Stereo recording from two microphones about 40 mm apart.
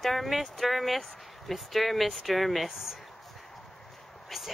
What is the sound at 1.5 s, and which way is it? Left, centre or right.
Speech, centre.